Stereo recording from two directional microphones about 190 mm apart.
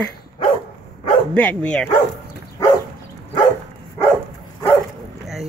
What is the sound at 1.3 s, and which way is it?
Speech, 5° left (ahead or behind).